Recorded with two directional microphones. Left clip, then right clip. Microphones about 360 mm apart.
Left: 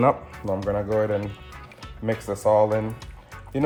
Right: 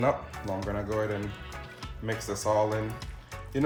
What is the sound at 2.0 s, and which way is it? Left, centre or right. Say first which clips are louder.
Speech: left 7 dB; centre.